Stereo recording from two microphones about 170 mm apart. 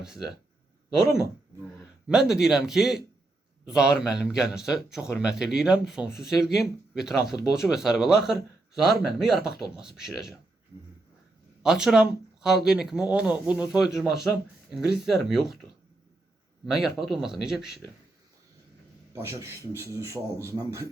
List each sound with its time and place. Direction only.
0.0 s speech: 5° right (ahead or behind)
2.0 s speech: 5° right (ahead or behind)
11.6 s speech: 5° right (ahead or behind)
16.6 s speech: centre (ahead or behind)
19.1 s a man's voice: 15° right (ahead or behind)